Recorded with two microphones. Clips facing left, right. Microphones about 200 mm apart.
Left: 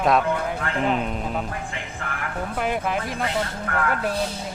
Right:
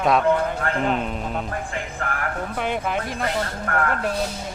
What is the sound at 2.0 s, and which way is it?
Vehicle, 50° right (ahead or behind).